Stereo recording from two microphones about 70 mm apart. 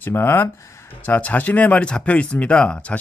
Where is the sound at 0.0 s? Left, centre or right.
Left.